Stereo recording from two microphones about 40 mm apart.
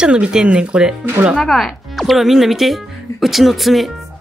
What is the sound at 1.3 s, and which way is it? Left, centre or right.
Speech, centre.